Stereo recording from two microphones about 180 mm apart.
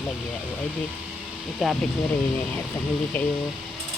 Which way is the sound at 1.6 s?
Centre (ahead or behind).